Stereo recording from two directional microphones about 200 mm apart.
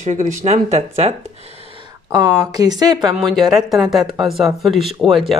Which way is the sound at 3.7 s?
Centre (ahead or behind).